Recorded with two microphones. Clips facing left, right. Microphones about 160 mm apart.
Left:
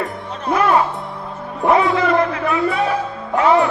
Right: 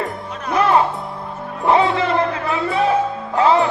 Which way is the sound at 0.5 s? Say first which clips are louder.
Even; 30° right (ahead or behind).